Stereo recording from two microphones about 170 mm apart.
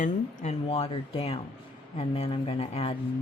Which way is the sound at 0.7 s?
35° left (ahead or behind).